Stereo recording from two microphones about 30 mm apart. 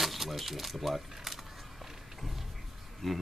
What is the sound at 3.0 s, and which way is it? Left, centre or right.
Speech, centre.